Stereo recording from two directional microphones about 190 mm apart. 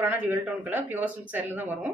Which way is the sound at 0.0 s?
10° right (ahead or behind).